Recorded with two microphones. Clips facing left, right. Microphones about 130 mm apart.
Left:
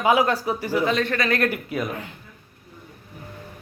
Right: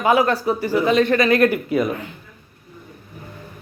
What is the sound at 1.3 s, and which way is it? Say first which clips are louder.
Speech: right 7 dB; centre (ahead or behind).